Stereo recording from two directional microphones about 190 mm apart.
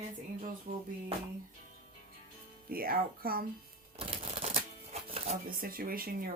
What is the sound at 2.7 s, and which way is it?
Speech, 50° right (ahead or behind).